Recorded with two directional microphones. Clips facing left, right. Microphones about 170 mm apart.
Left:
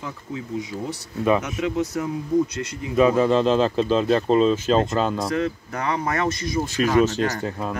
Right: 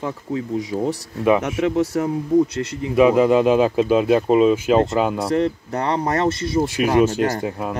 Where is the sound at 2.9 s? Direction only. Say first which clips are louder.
Right 3 dB; 15° right (ahead or behind).